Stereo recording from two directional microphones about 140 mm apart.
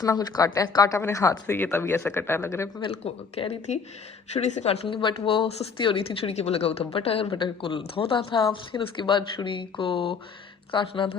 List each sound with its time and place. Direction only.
0.0 s a woman's voice: 25° left (ahead or behind)
2.8 s speech: 45° left (ahead or behind)